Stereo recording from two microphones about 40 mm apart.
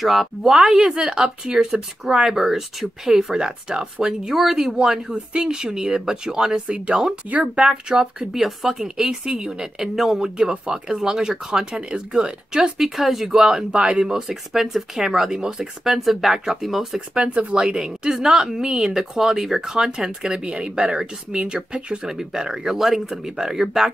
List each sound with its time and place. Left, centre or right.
0.0 s speech: centre
0.9 s a woman's voice: centre
8.2 s speech: centre
8.9 s a woman's voice: centre
9.9 s a woman's voice: centre
11.5 s speech: right
12.9 s speech: centre
13.4 s a woman's voice: centre
14.0 s a woman's voice: centre
15.9 s speech: centre
17.1 s speech: right
17.6 s a woman's voice: centre
20.4 s a woman's voice: right
22.8 s a woman's voice: centre